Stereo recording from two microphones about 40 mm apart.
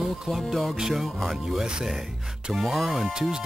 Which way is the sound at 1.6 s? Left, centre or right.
Right.